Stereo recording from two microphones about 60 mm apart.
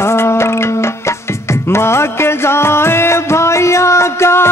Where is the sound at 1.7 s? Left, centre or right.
Left.